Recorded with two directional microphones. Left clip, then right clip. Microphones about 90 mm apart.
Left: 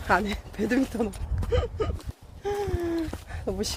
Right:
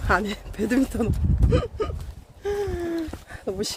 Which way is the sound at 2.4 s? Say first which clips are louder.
Right 2 dB; 80° right.